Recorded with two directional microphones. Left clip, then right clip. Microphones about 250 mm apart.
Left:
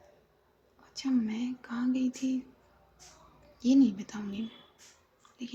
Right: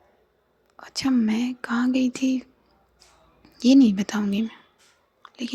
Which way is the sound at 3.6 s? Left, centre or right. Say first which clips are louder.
Right 8 dB; right.